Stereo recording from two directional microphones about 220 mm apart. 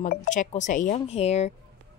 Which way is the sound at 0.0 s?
35° left (ahead or behind).